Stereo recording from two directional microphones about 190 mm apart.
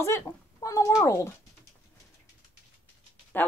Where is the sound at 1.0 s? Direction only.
15° left (ahead or behind).